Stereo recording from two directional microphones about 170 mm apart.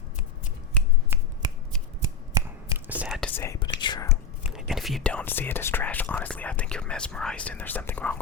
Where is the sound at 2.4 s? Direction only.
20° right (ahead or behind).